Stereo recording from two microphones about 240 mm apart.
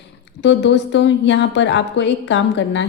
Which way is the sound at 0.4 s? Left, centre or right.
Left.